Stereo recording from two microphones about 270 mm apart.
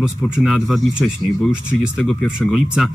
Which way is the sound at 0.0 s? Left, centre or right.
Centre.